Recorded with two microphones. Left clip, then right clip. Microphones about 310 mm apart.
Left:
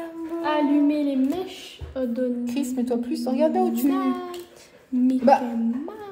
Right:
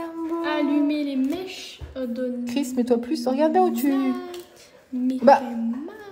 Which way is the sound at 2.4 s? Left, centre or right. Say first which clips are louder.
Right 2 dB; right.